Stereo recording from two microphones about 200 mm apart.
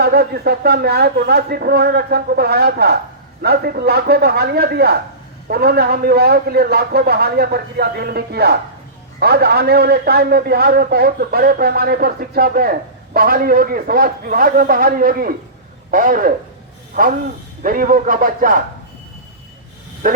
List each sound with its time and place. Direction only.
0.0 s a man's voice: 50° right (ahead or behind)